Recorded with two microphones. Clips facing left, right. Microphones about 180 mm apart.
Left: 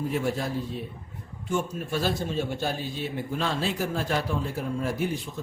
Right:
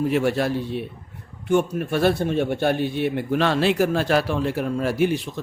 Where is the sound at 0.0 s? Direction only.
75° right (ahead or behind).